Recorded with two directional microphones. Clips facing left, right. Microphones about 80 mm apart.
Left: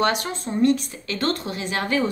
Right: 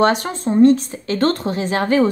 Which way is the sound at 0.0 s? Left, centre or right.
Right.